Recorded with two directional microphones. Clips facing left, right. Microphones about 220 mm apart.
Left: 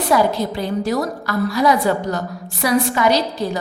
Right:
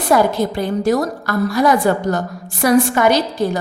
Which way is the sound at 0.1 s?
50° right (ahead or behind).